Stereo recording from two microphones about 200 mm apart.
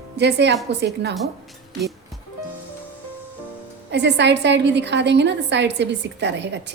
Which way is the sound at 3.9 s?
60° right (ahead or behind).